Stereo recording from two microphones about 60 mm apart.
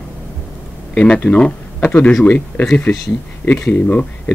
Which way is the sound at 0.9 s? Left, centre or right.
Centre.